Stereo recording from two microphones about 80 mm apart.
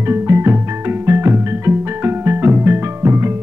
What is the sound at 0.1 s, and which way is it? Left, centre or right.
Music, right.